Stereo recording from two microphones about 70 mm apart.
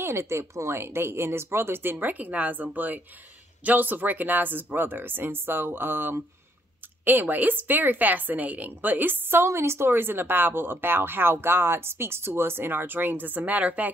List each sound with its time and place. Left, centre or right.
0.0 s speech: right